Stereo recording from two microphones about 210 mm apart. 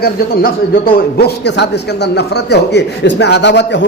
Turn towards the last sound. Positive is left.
turn(degrees=55)  # may be behind; listen again after turning